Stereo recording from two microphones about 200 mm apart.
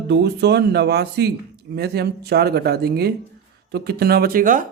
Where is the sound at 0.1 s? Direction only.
55° right (ahead or behind).